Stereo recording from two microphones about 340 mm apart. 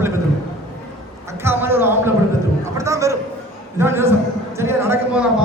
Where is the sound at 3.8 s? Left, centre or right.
Centre.